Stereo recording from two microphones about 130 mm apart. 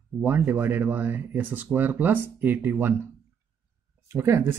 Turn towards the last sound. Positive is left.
turn(degrees=-20)  # may be behind; listen again after turning